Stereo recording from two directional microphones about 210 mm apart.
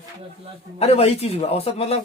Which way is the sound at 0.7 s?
30° left (ahead or behind).